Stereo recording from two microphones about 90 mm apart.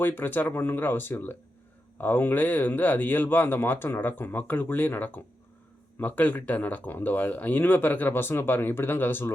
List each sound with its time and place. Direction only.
0.0 s speech: 20° left (ahead or behind)